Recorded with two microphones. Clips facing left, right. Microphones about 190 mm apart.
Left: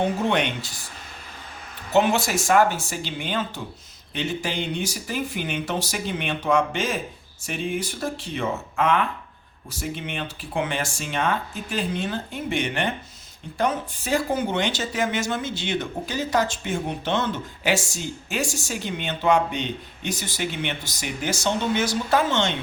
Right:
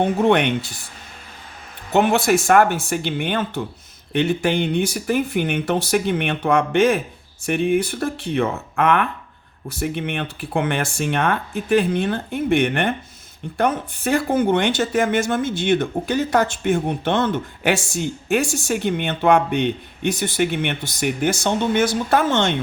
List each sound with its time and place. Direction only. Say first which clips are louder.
0.2 s speech: right 7 dB; 55° right (ahead or behind)
1.9 s speech: right 4 dB; 55° right (ahead or behind)